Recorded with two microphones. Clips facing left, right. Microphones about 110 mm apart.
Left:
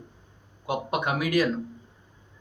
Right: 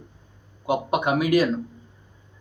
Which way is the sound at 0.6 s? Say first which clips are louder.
Right 5 dB; 15° right (ahead or behind).